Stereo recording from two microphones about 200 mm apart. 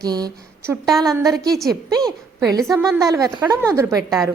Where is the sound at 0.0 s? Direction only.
20° right (ahead or behind).